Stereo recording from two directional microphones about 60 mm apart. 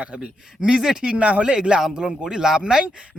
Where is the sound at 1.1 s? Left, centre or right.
Right.